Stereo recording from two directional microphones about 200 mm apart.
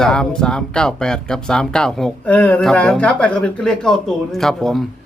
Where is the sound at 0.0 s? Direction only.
5° left (ahead or behind).